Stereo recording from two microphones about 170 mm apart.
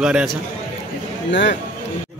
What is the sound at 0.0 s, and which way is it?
Speech, 5° right (ahead or behind).